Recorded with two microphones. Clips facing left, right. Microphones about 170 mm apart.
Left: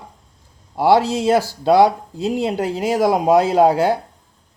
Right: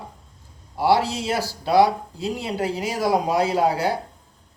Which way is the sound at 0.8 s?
50° left (ahead or behind).